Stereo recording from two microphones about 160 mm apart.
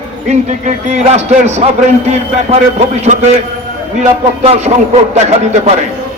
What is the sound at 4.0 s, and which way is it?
A man's voice, 40° right (ahead or behind).